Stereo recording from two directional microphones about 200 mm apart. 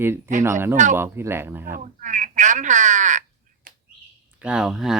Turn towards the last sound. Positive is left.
turn(degrees=0)  # may be behind; listen again after turning